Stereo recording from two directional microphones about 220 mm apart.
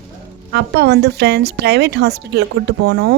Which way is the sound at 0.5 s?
50° right (ahead or behind).